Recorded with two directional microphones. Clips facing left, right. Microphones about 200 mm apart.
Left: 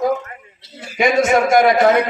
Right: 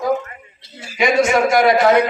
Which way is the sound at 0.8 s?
55° left (ahead or behind).